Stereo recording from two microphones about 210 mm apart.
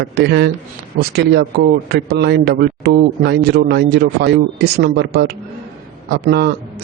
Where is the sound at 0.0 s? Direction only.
50° right (ahead or behind).